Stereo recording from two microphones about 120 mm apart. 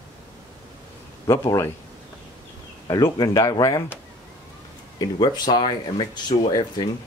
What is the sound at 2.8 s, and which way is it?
Speech, 30° left (ahead or behind).